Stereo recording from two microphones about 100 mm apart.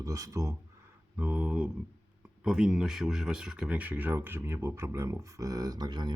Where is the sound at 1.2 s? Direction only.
15° right (ahead or behind).